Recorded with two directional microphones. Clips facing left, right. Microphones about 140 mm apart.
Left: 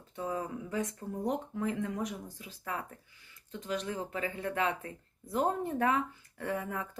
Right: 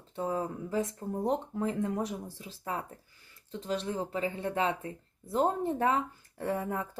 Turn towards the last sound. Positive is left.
turn(degrees=-30)  # may be behind; listen again after turning